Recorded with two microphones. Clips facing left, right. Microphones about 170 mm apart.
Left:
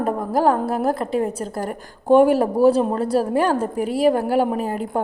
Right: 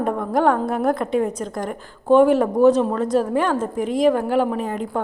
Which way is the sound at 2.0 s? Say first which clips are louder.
Even; 10° left (ahead or behind).